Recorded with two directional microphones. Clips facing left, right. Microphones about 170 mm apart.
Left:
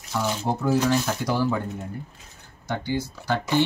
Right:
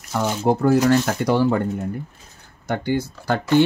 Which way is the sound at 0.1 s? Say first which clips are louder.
Right 6 dB; 60° right (ahead or behind).